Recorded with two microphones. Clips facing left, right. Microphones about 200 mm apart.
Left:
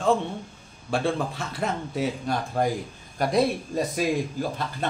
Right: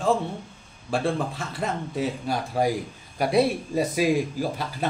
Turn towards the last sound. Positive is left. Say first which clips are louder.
# right 2 dB
turn(degrees=-10)  # may be behind; listen again after turning